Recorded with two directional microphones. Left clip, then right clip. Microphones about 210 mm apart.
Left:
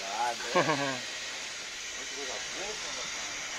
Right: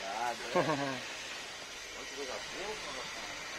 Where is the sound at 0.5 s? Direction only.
15° left (ahead or behind).